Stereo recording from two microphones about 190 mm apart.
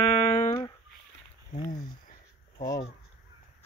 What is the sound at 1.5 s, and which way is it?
Speech, 45° left (ahead or behind).